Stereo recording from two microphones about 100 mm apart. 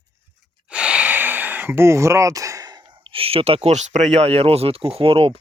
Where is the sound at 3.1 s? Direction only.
70° right (ahead or behind).